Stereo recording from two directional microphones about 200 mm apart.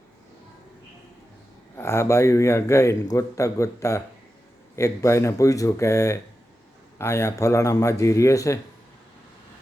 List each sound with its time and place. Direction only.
1.7 s a man's voice: 15° left (ahead or behind)